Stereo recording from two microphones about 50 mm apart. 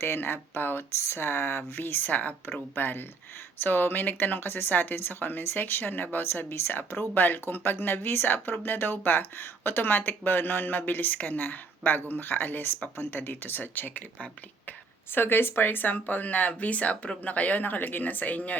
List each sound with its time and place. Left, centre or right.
0.0 s speech: left
1.0 s speech: left